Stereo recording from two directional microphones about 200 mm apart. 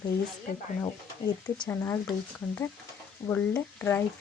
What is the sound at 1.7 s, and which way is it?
Speech, 15° left (ahead or behind).